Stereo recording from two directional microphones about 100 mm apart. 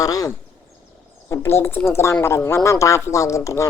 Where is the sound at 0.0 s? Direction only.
35° left (ahead or behind).